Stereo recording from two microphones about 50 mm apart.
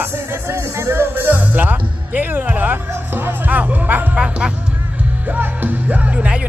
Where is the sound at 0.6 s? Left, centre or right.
Right.